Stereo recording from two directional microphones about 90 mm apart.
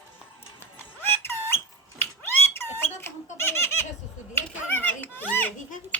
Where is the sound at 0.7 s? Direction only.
25° left (ahead or behind).